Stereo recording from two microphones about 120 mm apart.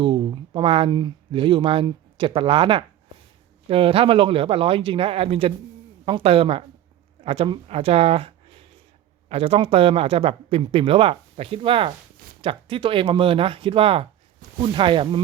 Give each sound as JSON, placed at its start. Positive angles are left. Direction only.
{"t": 0.0, "sound": "speech", "side_deg": -45}